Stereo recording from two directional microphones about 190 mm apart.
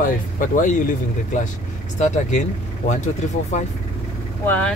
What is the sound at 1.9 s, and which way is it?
Speech, 40° left (ahead or behind).